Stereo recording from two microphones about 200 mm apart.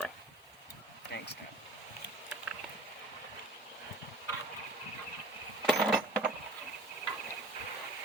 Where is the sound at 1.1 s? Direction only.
55° left (ahead or behind).